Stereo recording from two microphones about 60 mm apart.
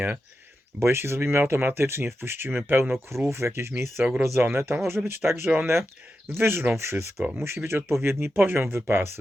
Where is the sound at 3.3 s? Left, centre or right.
Right.